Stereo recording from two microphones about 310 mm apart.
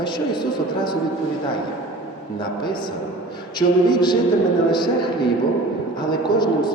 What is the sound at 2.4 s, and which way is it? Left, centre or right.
A man's voice, centre.